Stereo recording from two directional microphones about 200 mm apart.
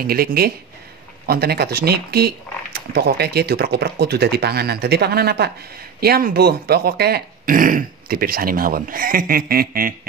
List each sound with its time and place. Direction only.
0.0 s speech: 50° right (ahead or behind)